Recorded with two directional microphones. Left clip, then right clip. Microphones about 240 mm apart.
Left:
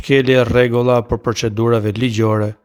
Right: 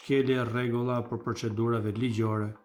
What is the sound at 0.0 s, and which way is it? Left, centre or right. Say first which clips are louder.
Speech: left 14 dB; left.